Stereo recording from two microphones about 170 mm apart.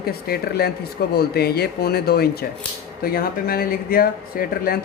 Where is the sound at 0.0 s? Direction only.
65° left (ahead or behind).